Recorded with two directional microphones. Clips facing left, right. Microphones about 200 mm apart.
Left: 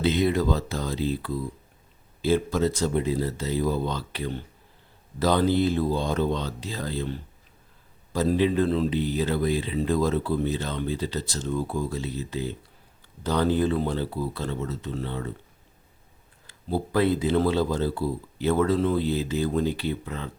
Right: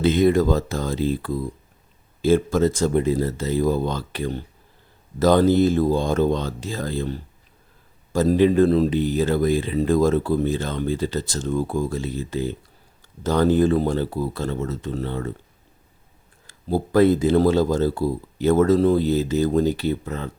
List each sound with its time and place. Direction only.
0.0 s speech: 50° right (ahead or behind)
16.5 s speech: 45° right (ahead or behind)